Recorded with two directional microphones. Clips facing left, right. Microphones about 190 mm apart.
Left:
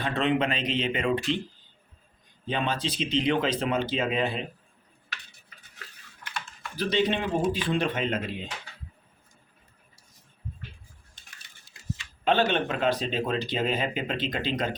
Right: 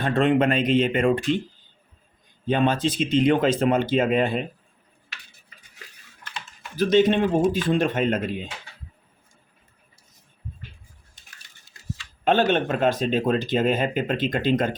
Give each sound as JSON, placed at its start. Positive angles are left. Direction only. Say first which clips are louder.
{"t": 0.0, "sound": "speech", "louder": "right 6 dB", "side_deg": -50}
{"t": 2.5, "sound": "speech", "louder": "right 8 dB", "side_deg": -50}
{"t": 6.7, "sound": "speech", "louder": "right 8 dB", "side_deg": -45}
{"t": 12.2, "sound": "speech", "louder": "right 4 dB", "side_deg": -45}